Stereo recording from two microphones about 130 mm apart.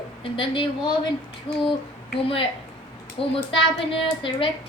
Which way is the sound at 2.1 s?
40° left (ahead or behind).